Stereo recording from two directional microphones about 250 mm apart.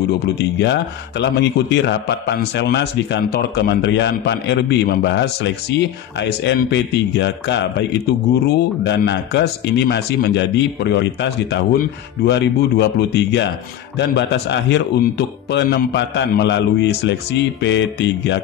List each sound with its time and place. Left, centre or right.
0.4 s a man's voice: left
8.8 s a man's voice: left